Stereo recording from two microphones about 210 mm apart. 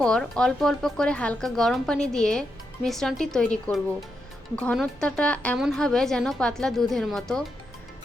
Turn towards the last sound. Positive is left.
turn(degrees=0)  # may be behind; listen again after turning